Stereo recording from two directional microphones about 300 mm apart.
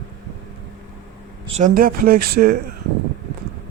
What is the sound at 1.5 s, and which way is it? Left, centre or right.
Speech, right.